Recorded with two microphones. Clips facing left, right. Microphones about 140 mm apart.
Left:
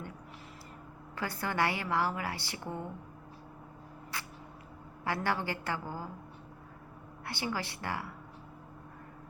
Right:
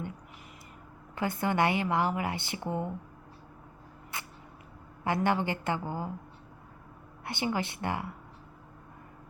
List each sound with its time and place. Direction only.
1.1 s a woman's voice: 20° right (ahead or behind)
4.1 s a sound: 20° right (ahead or behind)
5.0 s a woman's voice: 20° right (ahead or behind)
7.3 s a woman's voice: 20° right (ahead or behind)